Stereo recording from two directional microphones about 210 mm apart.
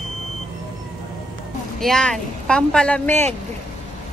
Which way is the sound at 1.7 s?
Centre (ahead or behind).